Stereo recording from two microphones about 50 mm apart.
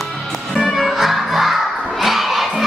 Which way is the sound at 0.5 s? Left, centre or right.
Centre.